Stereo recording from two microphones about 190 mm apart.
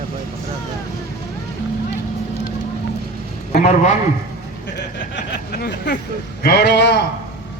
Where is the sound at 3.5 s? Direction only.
40° left (ahead or behind).